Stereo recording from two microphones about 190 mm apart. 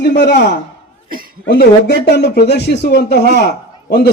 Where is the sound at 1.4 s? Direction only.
60° left (ahead or behind).